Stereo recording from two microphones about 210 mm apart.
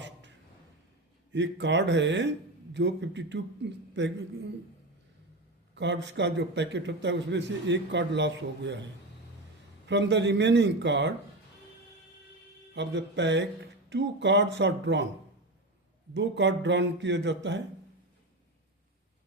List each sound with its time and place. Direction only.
0.0 s a sound: 60° right (ahead or behind)
1.3 s a man's voice: 60° right (ahead or behind)
5.7 s a man's voice: 55° right (ahead or behind)
12.7 s a man's voice: 55° right (ahead or behind)
16.1 s a man's voice: 60° right (ahead or behind)